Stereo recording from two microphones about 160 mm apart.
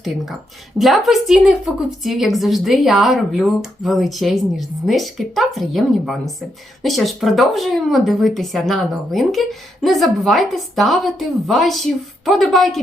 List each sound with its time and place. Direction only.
0.8 s a woman's voice: centre (ahead or behind)